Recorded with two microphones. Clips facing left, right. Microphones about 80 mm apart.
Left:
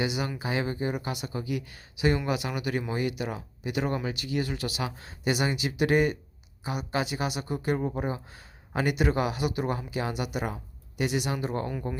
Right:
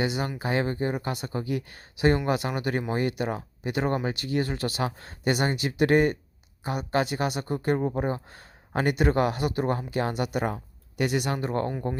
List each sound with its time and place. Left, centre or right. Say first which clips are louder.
0.0 s speech: right 2 dB; right